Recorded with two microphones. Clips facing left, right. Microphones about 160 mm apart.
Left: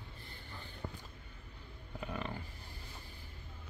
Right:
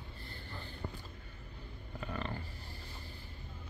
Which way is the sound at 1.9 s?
10° left (ahead or behind).